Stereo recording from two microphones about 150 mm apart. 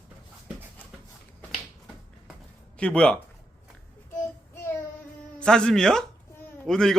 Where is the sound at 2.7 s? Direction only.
5° left (ahead or behind).